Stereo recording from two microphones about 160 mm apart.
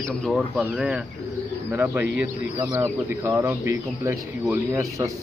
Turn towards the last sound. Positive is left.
turn(degrees=-20)  # may be behind; listen again after turning